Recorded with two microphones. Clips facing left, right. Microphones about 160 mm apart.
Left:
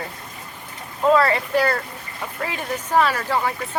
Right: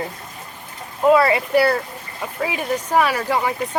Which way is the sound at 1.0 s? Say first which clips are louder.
Right 3 dB; 10° right (ahead or behind).